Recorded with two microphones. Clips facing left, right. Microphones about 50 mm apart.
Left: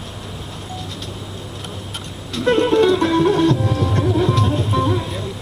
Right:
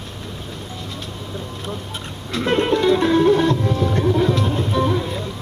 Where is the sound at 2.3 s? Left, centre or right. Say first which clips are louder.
Left 3 dB; right.